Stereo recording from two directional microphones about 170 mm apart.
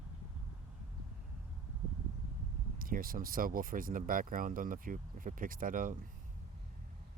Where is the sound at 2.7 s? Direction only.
55° right (ahead or behind).